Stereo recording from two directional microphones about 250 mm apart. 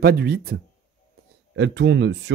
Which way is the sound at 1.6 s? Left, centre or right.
Right.